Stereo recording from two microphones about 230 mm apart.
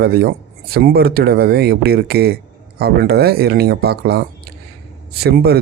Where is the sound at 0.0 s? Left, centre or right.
Right.